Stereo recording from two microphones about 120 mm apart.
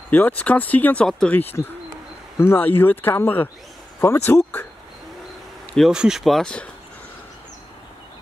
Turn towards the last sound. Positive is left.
turn(degrees=5)  # may be behind; listen again after turning